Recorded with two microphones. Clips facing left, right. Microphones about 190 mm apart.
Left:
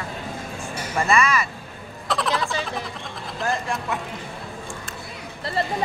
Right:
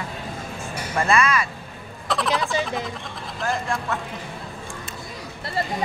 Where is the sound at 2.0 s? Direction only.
Centre (ahead or behind).